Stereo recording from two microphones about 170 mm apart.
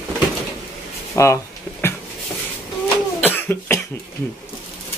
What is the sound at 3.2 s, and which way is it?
Cough, 10° left (ahead or behind).